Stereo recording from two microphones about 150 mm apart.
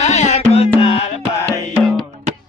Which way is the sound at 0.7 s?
35° left (ahead or behind).